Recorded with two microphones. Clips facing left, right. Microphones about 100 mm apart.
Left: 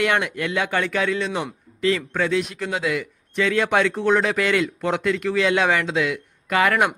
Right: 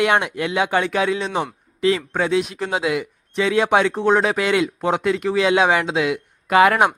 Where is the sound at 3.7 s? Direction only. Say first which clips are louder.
Right 2 dB; 40° right (ahead or behind).